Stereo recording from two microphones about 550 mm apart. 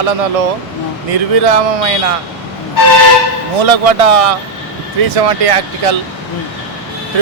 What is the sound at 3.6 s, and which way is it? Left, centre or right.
Speech, right.